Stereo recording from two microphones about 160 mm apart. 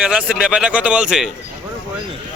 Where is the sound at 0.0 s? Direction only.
5° right (ahead or behind).